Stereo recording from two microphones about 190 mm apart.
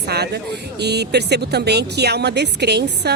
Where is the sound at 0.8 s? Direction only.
60° right (ahead or behind).